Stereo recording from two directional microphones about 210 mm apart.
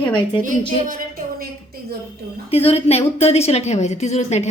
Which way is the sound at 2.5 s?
30° left (ahead or behind).